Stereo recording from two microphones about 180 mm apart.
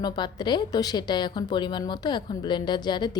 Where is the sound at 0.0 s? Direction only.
25° left (ahead or behind).